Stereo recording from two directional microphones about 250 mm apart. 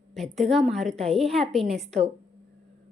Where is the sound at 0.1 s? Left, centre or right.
Centre.